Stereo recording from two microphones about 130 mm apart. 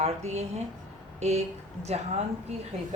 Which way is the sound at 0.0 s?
55° right (ahead or behind).